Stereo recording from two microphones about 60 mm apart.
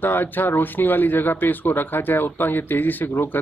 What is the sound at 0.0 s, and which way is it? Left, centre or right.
Speech, left.